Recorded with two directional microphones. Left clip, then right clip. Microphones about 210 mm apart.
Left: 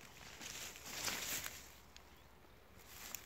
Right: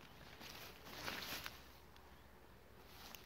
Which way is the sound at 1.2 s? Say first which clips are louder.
Left 3 dB; centre (ahead or behind).